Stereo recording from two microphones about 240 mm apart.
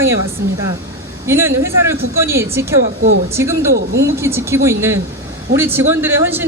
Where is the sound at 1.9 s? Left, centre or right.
Right.